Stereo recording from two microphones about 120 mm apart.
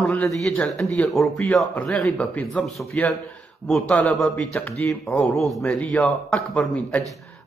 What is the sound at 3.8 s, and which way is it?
Speech, 10° left (ahead or behind).